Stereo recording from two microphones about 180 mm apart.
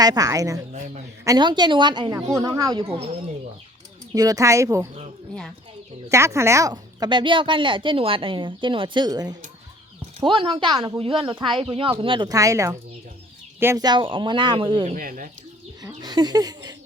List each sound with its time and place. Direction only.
0.0 s speech: 20° right (ahead or behind)
2.8 s speech: 30° right (ahead or behind)
4.1 s speech: 20° right (ahead or behind)
6.1 s speech: 15° right (ahead or behind)
14.9 s speech: 50° right (ahead or behind)
15.8 s speech: 20° right (ahead or behind)